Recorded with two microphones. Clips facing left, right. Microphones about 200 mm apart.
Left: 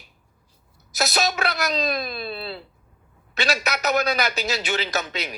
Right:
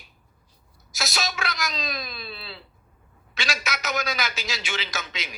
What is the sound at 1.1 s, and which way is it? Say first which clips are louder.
A man's voice: left 6 dB; 60° left (ahead or behind).